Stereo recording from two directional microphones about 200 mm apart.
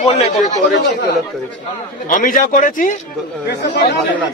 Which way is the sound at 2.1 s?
40° left (ahead or behind).